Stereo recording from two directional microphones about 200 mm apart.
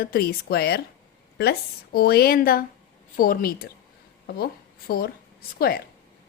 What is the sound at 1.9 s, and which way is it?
A woman's voice, 50° left (ahead or behind).